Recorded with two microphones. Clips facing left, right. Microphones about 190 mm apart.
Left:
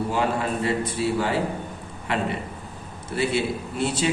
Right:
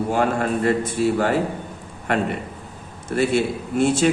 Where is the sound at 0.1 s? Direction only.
50° right (ahead or behind).